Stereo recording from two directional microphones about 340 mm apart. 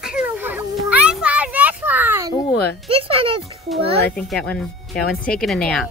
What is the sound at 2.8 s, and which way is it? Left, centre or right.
Speech, centre.